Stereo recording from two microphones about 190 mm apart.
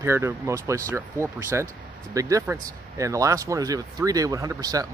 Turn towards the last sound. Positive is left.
turn(degrees=-20)  # may be behind; listen again after turning